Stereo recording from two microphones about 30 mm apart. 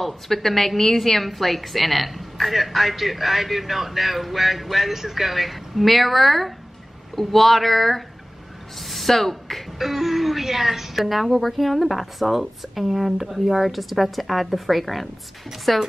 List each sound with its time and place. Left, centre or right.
0.0 s a woman's voice: centre
9.8 s a woman's voice: centre